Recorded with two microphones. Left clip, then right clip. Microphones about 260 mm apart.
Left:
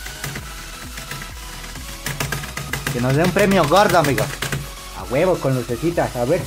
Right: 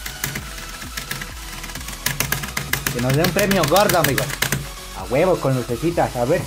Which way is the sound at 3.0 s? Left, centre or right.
Centre.